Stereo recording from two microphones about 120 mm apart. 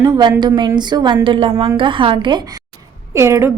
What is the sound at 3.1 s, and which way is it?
Speech, 25° right (ahead or behind).